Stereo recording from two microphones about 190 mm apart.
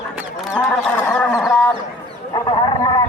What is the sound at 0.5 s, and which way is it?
Chicken, 5° left (ahead or behind).